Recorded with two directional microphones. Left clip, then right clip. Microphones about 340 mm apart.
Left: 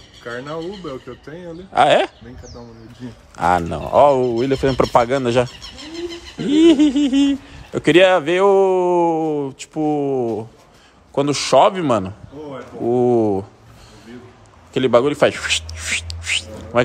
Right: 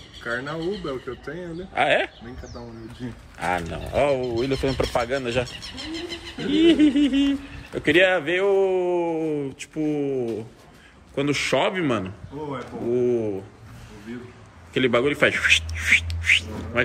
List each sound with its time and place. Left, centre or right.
0.2 s speech: centre
1.8 s a man's voice: centre
3.4 s speech: left
3.9 s a man's voice: centre
14.7 s music: centre